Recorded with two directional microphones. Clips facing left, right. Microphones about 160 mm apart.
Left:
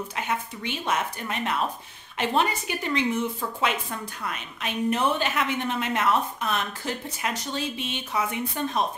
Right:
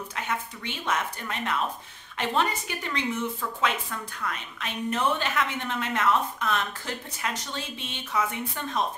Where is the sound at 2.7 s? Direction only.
15° left (ahead or behind).